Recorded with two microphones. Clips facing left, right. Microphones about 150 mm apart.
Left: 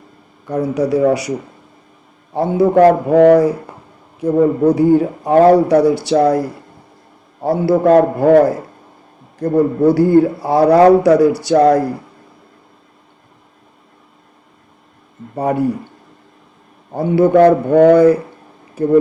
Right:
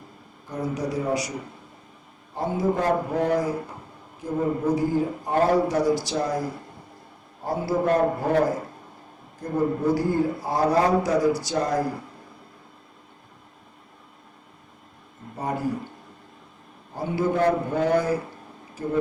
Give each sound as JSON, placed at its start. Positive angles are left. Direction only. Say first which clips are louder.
{"t": 0.4, "sound": "speech", "louder": "left 11 dB", "side_deg": 65}
{"t": 2.3, "sound": "speech", "louder": "left 12 dB", "side_deg": 70}
{"t": 15.4, "sound": "speech", "louder": "left 11 dB", "side_deg": 65}
{"t": 16.9, "sound": "a man's voice", "louder": "left 13 dB", "side_deg": 65}